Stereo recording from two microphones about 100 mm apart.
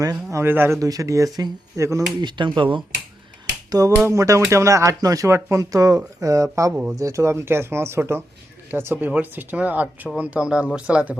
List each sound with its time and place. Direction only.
0.0 s speech: 35° right (ahead or behind)
0.8 s speech: 35° right (ahead or behind)
2.2 s speech: 50° right (ahead or behind)
3.7 s finger snapping: 35° right (ahead or behind)
4.0 s speech: 30° right (ahead or behind); by 11.2 s 10° right (ahead or behind)